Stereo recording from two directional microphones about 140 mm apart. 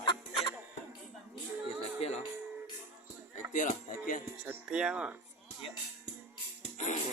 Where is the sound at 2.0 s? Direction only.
50° left (ahead or behind).